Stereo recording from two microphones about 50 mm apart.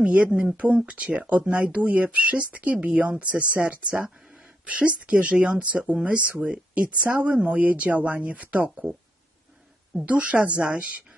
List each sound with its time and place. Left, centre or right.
0.0 s speech: right
9.9 s speech: right